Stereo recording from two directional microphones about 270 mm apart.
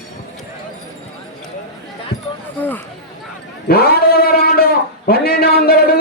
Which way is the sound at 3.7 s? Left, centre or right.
Left.